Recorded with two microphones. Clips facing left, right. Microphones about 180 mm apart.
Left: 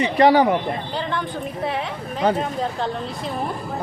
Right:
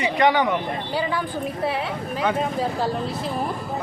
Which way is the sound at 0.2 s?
35° left (ahead or behind).